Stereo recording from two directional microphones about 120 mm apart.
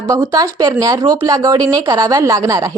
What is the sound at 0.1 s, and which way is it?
A woman's voice, 30° right (ahead or behind).